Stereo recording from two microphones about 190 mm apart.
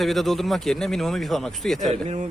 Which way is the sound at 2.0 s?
40° right (ahead or behind).